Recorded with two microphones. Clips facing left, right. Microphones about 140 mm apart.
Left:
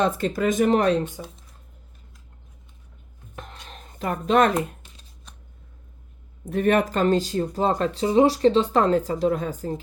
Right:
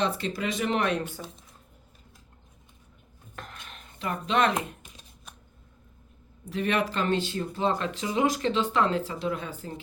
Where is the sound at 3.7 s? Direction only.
40° left (ahead or behind).